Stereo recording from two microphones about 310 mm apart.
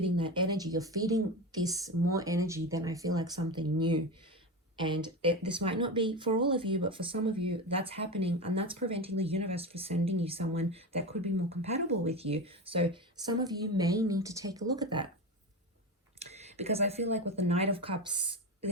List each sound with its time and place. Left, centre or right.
0.2 s speech: centre
16.1 s speech: right